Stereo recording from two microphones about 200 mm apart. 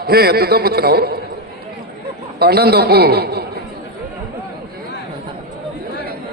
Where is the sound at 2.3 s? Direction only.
50° right (ahead or behind).